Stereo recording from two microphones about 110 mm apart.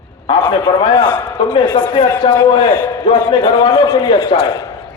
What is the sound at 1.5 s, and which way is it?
Speech, 50° left (ahead or behind).